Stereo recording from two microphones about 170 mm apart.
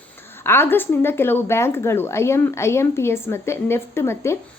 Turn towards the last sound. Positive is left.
turn(degrees=15)  # may be behind; listen again after turning